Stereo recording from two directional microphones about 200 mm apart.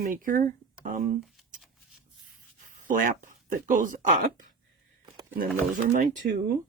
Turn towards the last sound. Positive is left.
turn(degrees=-40)  # may be behind; listen again after turning